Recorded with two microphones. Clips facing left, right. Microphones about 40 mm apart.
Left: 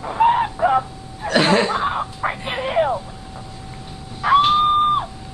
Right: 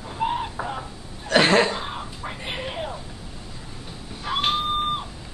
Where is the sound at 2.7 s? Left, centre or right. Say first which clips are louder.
Left 13 dB; left.